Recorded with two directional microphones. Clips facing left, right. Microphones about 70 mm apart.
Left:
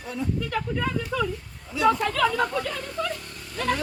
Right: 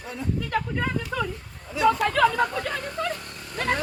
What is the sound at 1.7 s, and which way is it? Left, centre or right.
Speech, right.